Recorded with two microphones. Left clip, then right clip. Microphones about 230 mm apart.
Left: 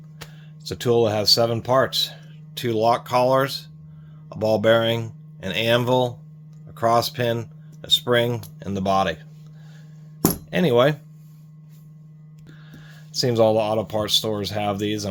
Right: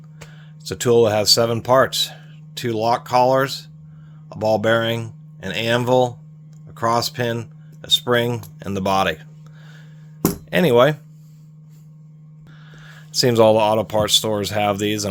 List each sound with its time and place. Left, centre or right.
0.6 s speech: right
2.6 s speech: centre; by 9.1 s right
10.5 s speech: right
13.1 s speech: right